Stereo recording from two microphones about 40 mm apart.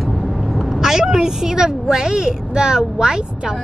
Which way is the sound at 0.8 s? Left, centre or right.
Centre.